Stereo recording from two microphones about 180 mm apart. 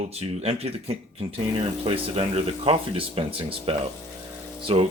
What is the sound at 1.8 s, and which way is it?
Speech, 30° right (ahead or behind).